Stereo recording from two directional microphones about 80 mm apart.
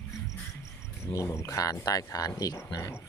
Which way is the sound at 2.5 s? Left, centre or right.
Left.